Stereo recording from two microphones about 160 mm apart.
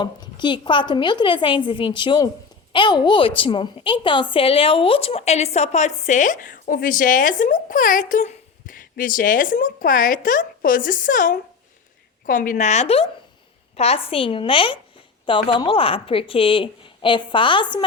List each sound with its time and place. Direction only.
0.0 s a woman's voice: 30° left (ahead or behind)